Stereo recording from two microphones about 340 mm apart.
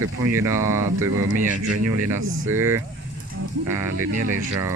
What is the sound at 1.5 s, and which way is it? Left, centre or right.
Speech, right.